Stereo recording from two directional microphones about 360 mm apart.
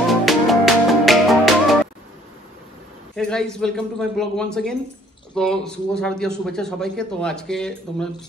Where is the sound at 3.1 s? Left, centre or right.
Centre.